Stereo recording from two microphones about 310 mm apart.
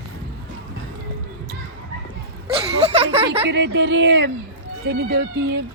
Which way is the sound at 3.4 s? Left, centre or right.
Right.